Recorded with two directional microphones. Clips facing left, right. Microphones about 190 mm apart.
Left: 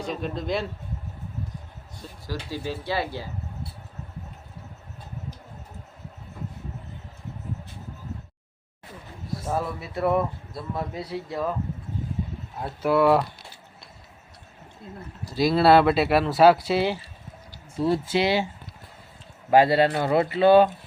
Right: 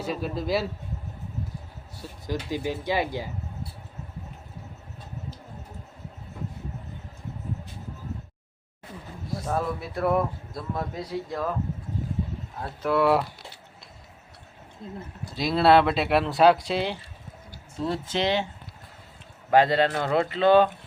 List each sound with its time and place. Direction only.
0.0 s a man's voice: 5° right (ahead or behind)
2.2 s speech: 20° right (ahead or behind)
9.5 s a man's voice: 5° left (ahead or behind)
12.8 s a man's voice: centre (ahead or behind)
14.8 s a man's voice: 5° left (ahead or behind)
19.5 s speech: 10° left (ahead or behind)